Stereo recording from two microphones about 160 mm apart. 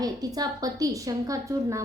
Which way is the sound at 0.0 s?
25° right (ahead or behind).